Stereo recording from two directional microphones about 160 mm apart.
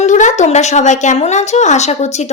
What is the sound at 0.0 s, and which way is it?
A woman's voice, 50° left (ahead or behind).